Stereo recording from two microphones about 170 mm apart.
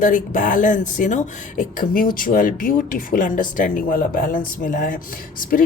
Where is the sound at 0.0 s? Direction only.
50° left (ahead or behind).